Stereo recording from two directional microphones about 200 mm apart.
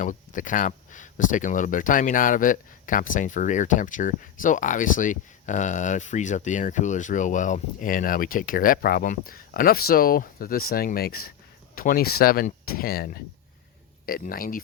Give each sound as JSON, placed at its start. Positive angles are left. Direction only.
{"t": 0.0, "sound": "speech", "side_deg": 40}